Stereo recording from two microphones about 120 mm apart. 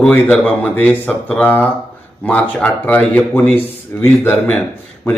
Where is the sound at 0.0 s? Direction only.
10° left (ahead or behind).